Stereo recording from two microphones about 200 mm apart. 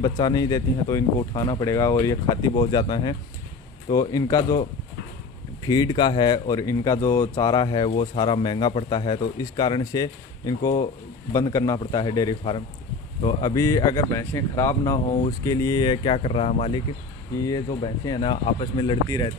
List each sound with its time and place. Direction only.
0.0 s speech: 20° left (ahead or behind)
17.4 s speech: 20° left (ahead or behind)